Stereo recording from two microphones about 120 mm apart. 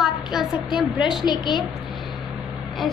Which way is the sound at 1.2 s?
35° left (ahead or behind).